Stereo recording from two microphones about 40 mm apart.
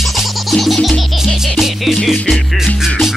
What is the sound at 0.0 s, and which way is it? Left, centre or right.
Music, centre.